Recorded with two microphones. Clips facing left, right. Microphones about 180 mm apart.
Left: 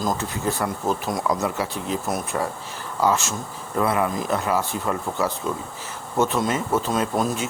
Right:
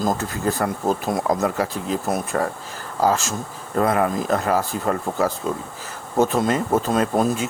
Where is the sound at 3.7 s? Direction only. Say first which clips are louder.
Right 3 dB; 45° right (ahead or behind).